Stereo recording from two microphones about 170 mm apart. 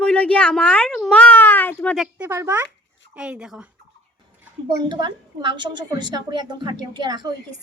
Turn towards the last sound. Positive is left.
turn(degrees=-25)  # may be behind; listen again after turning